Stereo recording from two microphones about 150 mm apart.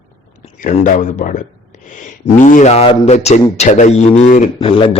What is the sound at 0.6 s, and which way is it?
Speech, 55° left (ahead or behind).